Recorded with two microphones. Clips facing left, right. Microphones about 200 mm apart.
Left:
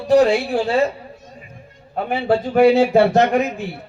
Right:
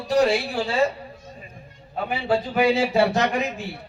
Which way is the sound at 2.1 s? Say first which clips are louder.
Left 5 dB; 50° left (ahead or behind).